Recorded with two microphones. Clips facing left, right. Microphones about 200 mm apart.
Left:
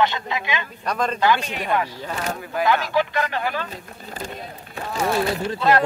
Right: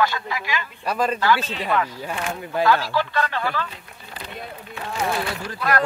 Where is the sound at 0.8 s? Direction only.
5° right (ahead or behind).